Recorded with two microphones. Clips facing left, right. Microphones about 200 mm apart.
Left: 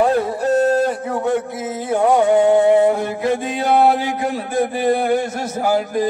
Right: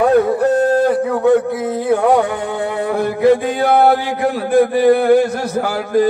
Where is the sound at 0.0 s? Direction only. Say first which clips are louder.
Right 5 dB; 60° right (ahead or behind).